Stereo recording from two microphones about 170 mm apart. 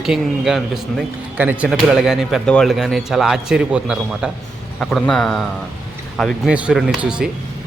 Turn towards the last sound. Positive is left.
turn(degrees=-5)  # may be behind; listen again after turning